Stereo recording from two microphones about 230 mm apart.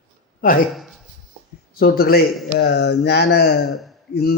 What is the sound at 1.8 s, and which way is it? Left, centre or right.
A man's voice, left.